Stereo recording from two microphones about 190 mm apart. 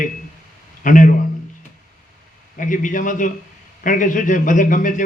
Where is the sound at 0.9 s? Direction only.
45° left (ahead or behind).